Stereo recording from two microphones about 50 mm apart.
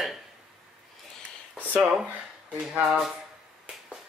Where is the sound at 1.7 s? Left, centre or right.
Right.